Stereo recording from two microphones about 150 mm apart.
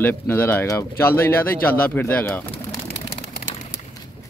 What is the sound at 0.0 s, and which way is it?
Speech, 15° left (ahead or behind).